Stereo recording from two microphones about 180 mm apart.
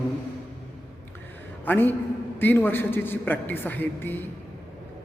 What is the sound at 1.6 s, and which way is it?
A man's voice, 10° left (ahead or behind).